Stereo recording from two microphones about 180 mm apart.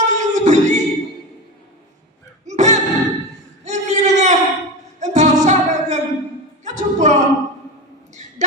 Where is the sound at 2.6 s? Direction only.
40° right (ahead or behind).